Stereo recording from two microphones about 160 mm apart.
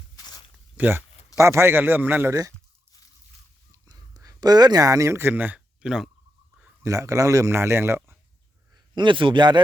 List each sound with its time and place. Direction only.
0.2 s zipper: 25° left (ahead or behind)
0.8 s a man's voice: 15° right (ahead or behind)
3.7 s a sound: 20° right (ahead or behind); by 6.1 s 5° right (ahead or behind)
6.8 s a man's voice: 20° right (ahead or behind)
9.0 s a man's voice: 30° right (ahead or behind)